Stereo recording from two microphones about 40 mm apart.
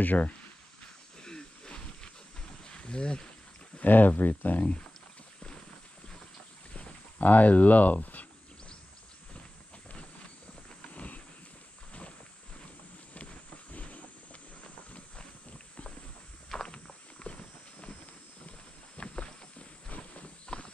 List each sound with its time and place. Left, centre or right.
0.0 s speech: left
1.2 s a sound: centre
2.6 s wild animals: left
3.8 s speech: left
6.7 s boat: left
7.2 s speech: left
10.9 s wild animals: left
13.1 s a sound: left
16.5 s walk: centre
17.2 s walk: left
18.9 s a sound: left
19.9 s walk: left
20.4 s clip-clop: left